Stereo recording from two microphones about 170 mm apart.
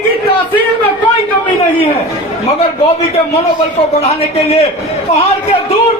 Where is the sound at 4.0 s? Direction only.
35° left (ahead or behind).